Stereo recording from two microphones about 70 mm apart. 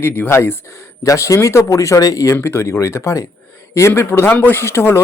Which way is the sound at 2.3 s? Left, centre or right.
Left.